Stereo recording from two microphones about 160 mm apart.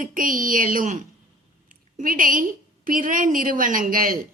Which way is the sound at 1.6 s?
60° right (ahead or behind).